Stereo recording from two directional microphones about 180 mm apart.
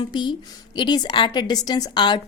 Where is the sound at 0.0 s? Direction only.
25° left (ahead or behind).